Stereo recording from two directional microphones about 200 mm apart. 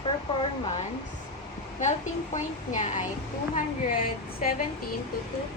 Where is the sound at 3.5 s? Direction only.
45° left (ahead or behind).